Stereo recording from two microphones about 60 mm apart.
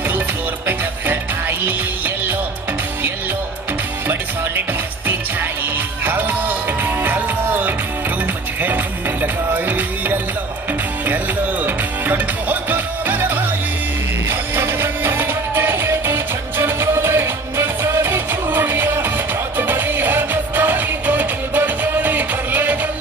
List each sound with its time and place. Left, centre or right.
4.1 s music: right
9.2 s music: right
11.6 s music: right
14.5 s music: right